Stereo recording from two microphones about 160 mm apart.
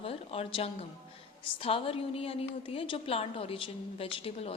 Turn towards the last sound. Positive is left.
turn(degrees=35)  # may be behind; listen again after turning